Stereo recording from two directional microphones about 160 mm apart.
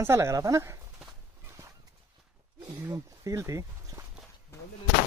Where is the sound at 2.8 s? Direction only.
20° right (ahead or behind).